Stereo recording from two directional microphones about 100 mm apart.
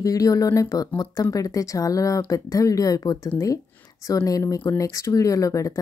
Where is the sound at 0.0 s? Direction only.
35° left (ahead or behind).